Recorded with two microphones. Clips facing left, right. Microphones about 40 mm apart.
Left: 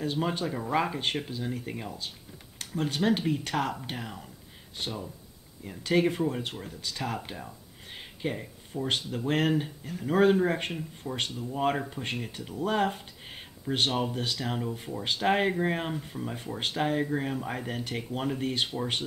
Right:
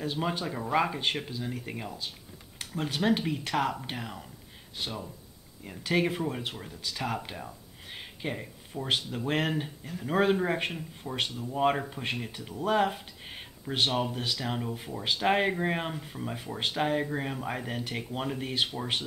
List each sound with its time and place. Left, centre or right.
0.0 s speech: centre
5.6 s speech: centre